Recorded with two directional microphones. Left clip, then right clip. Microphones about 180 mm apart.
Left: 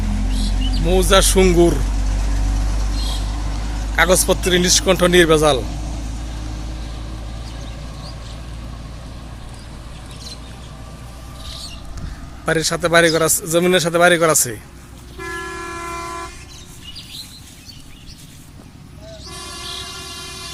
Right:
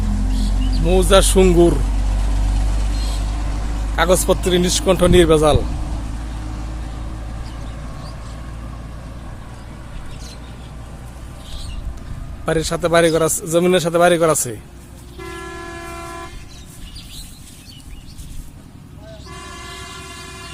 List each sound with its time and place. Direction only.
0.0 s music: 35° left (ahead or behind)
0.9 s a man's voice: centre (ahead or behind)
2.2 s vehicle: 45° left (ahead or behind)
3.9 s a man's voice: centre (ahead or behind)
12.5 s a man's voice: centre (ahead or behind)
15.2 s vehicle: 55° right (ahead or behind)